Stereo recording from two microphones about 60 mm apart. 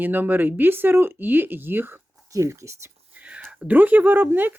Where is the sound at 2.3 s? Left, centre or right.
Right.